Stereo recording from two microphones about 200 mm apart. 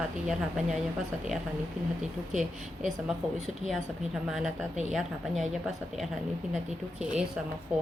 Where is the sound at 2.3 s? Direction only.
40° right (ahead or behind).